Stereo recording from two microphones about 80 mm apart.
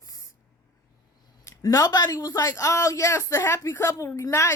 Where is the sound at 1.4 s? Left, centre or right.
Left.